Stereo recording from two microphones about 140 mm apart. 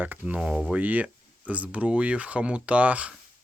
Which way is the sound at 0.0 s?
10° right (ahead or behind).